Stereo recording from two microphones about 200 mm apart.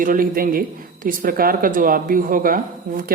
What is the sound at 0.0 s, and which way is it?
A woman's voice, 45° right (ahead or behind).